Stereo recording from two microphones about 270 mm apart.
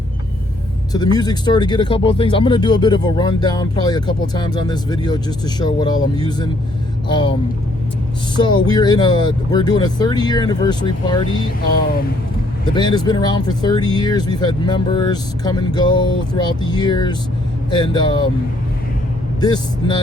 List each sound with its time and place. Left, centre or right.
0.9 s speech: centre
7.1 s speech: centre
8.4 s speech: centre
12.7 s speech: centre
19.4 s speech: centre